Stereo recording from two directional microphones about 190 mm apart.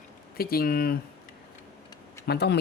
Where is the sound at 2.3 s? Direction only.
60° left (ahead or behind).